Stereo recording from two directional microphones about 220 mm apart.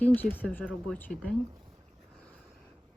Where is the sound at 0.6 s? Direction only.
5° right (ahead or behind).